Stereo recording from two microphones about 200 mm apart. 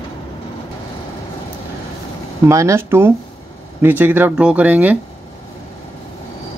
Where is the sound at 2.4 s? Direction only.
15° right (ahead or behind).